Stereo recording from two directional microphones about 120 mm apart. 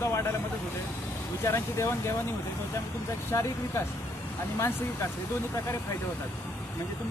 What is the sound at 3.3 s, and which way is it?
Speech, 30° left (ahead or behind).